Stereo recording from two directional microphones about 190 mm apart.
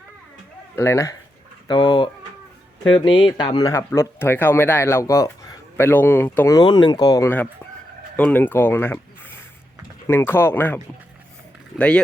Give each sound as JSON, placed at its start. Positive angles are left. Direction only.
{"t": 0.8, "sound": "speech", "side_deg": 15}
{"t": 3.2, "sound": "speech", "side_deg": 25}
{"t": 11.8, "sound": "speech", "side_deg": 5}